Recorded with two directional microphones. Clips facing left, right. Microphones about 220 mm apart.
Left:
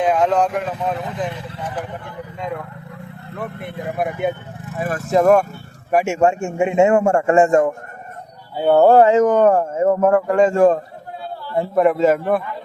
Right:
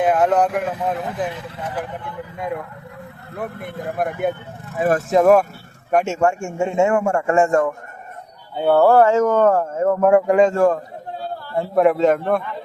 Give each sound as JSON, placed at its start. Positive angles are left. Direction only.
{"t": 0.0, "sound": "speech", "side_deg": -5}
{"t": 3.3, "sound": "speech", "side_deg": -10}
{"t": 3.8, "sound": "a man's voice", "side_deg": 5}
{"t": 6.1, "sound": "a man's voice", "side_deg": 20}
{"t": 7.0, "sound": "a man's voice", "side_deg": 30}
{"t": 10.1, "sound": "speech", "side_deg": -15}
{"t": 10.5, "sound": "speech", "side_deg": 15}
{"t": 11.7, "sound": "a man's voice", "side_deg": 0}